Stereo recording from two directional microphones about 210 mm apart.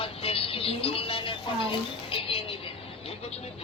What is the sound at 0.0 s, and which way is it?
Music, 25° left (ahead or behind).